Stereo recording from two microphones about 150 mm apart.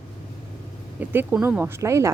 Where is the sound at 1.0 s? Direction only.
10° right (ahead or behind).